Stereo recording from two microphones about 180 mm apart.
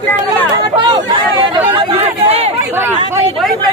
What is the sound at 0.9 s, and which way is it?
Chatter, 30° right (ahead or behind).